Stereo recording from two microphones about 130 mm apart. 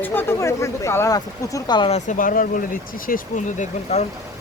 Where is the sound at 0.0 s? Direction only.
15° left (ahead or behind); by 1.9 s 35° left (ahead or behind).